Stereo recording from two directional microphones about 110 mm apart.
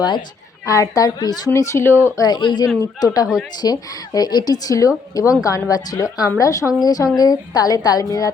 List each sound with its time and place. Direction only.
0.6 s a woman's voice: 30° left (ahead or behind)
1.5 s speech: 25° left (ahead or behind)
2.1 s a woman's voice: 40° left (ahead or behind)